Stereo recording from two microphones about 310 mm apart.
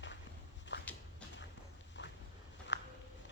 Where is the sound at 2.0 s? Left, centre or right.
Left.